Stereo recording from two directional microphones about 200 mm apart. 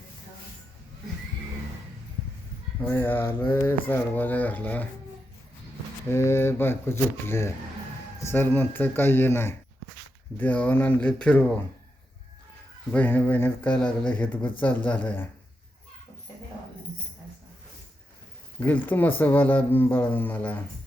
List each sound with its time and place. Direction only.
2.8 s speech: 10° left (ahead or behind)
6.1 s speech: 10° left (ahead or behind)
12.9 s speech: 10° left (ahead or behind)
18.6 s speech: 10° left (ahead or behind)